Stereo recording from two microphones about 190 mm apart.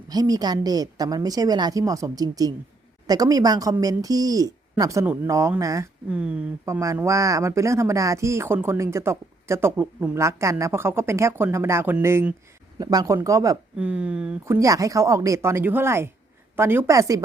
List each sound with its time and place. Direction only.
0.1 s a woman's voice: 20° right (ahead or behind)
6.1 s speech: 5° right (ahead or behind)
13.7 s speech: 5° right (ahead or behind)
14.4 s speech: 15° right (ahead or behind)